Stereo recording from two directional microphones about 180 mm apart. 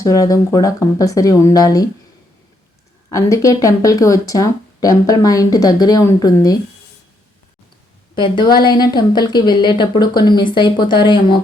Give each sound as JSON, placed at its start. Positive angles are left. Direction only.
{"t": 0.0, "sound": "speech", "side_deg": 20}
{"t": 3.1, "sound": "speech", "side_deg": 20}
{"t": 8.1, "sound": "speech", "side_deg": 25}